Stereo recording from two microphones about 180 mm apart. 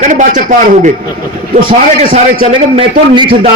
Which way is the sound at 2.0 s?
50° right (ahead or behind).